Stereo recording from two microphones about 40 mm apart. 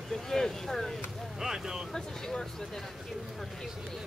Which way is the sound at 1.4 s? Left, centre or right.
Centre.